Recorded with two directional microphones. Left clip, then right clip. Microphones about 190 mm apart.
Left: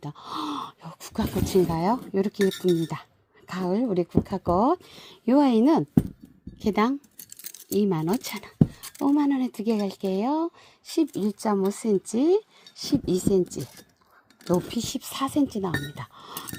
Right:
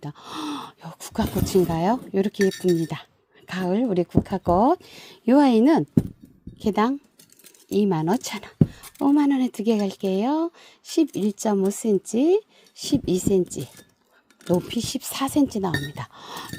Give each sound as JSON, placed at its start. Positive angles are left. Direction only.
{"t": 0.0, "sound": "speech", "side_deg": -20}
{"t": 14.5, "sound": "speech", "side_deg": -20}